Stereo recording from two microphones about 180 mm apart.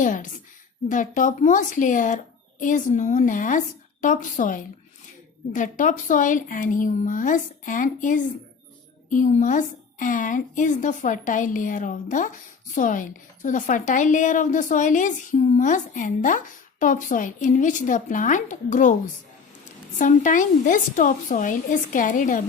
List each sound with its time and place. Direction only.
0.0 s a woman's voice: 45° left (ahead or behind)
20.0 s a woman's voice: 45° left (ahead or behind)